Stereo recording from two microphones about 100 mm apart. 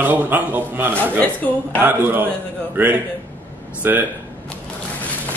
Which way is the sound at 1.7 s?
20° right (ahead or behind).